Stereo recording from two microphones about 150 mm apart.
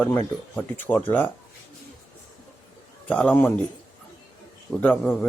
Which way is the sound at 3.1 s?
10° left (ahead or behind).